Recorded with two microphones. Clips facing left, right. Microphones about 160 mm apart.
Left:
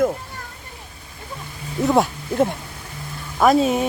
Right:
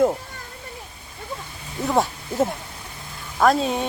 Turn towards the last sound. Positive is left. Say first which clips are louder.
# left 3 dB
turn(degrees=5)  # may be behind; listen again after turning